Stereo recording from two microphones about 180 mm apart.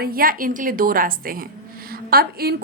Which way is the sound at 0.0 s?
55° right (ahead or behind).